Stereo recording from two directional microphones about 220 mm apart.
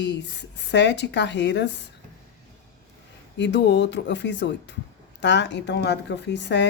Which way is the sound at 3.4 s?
55° left (ahead or behind).